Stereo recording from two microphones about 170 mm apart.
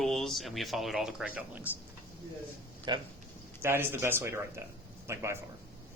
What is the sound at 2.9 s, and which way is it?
Speech, 25° right (ahead or behind).